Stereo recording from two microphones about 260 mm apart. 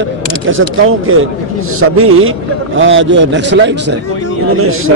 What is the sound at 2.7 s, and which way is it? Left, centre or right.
A man's voice, right.